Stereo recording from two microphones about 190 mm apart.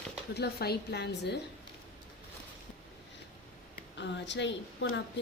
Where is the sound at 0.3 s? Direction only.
55° left (ahead or behind).